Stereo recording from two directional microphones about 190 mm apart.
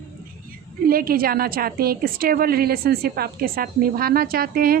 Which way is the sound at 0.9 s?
50° right (ahead or behind).